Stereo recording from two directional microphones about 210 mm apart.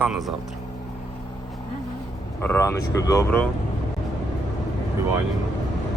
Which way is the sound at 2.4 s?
10° left (ahead or behind).